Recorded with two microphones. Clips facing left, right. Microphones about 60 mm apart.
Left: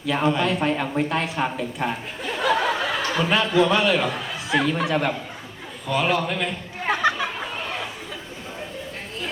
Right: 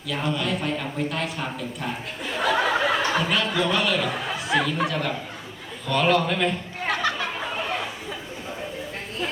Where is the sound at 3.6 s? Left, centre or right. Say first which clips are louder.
Left 3 dB; left.